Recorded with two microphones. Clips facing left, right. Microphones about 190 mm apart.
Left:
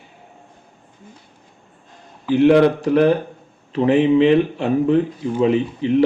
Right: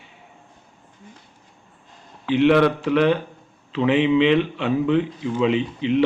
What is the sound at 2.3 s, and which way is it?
Speech, 40° left (ahead or behind).